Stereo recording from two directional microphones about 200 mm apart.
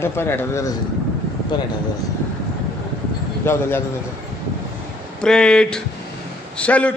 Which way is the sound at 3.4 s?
10° left (ahead or behind).